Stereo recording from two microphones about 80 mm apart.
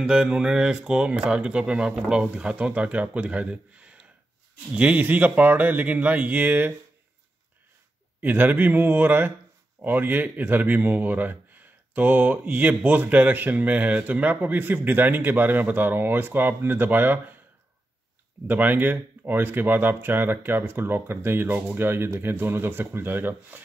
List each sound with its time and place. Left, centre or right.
0.0 s speech: centre
8.2 s speech: right
18.5 s speech: right